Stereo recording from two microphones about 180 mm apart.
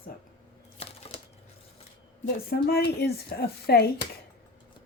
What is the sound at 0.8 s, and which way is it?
Typewriter, 35° left (ahead or behind).